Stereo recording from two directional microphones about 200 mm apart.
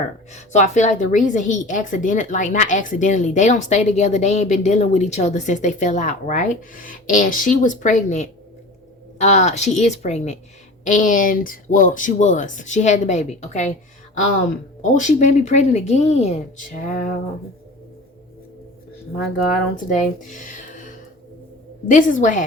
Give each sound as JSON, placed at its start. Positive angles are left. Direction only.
{"t": 0.3, "sound": "a woman's voice", "side_deg": 35}
{"t": 14.9, "sound": "a woman's voice", "side_deg": 35}
{"t": 19.5, "sound": "a woman's voice", "side_deg": 40}